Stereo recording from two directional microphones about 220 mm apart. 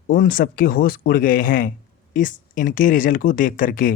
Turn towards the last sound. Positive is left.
turn(degrees=40)  # may be behind; listen again after turning